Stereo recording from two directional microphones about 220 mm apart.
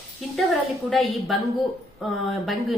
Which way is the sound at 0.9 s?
Centre (ahead or behind).